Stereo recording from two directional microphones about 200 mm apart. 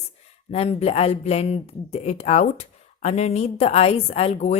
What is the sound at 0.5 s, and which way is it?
Speech, 30° left (ahead or behind).